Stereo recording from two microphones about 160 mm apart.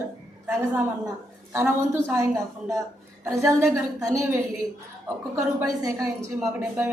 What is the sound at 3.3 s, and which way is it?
A woman's voice, 20° right (ahead or behind).